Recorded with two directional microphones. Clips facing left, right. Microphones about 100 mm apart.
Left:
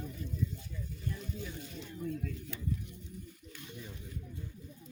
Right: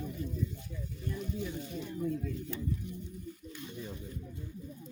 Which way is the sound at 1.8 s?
15° right (ahead or behind).